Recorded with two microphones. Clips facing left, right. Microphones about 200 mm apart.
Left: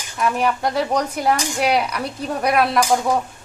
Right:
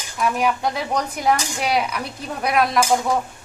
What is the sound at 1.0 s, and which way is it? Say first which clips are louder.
Speech: left 1 dB; 10° left (ahead or behind).